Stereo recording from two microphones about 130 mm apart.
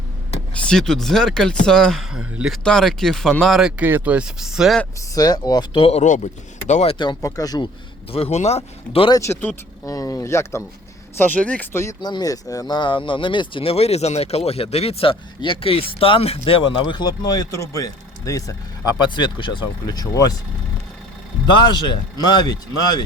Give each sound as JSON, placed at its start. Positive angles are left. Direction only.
{"t": 0.5, "sound": "speech", "side_deg": 5}
{"t": 4.9, "sound": "speech", "side_deg": 30}
{"t": 5.8, "sound": "speech", "side_deg": 60}
{"t": 7.0, "sound": "speech", "side_deg": 30}
{"t": 8.1, "sound": "speech", "side_deg": 50}
{"t": 9.1, "sound": "speech", "side_deg": 20}
{"t": 11.2, "sound": "speech", "side_deg": 10}
{"t": 12.0, "sound": "speech", "side_deg": 30}
{"t": 21.4, "sound": "speech", "side_deg": 35}